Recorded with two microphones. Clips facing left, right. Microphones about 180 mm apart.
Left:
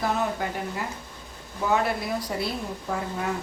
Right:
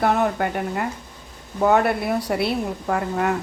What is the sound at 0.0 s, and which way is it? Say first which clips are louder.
A woman's voice: right 6 dB; 60° right (ahead or behind).